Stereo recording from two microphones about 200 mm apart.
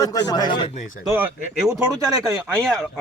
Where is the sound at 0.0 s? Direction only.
20° left (ahead or behind).